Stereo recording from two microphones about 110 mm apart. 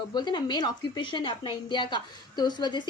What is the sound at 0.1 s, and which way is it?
A woman's voice, 40° left (ahead or behind).